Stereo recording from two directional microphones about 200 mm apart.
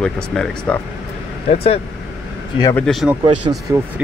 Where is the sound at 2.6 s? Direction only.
15° left (ahead or behind).